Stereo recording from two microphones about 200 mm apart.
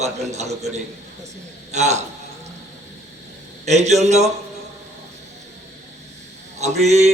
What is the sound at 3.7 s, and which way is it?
Speech, 35° right (ahead or behind).